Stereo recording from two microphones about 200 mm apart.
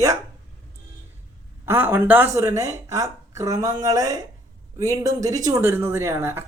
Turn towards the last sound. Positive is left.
turn(degrees=-15)  # may be behind; listen again after turning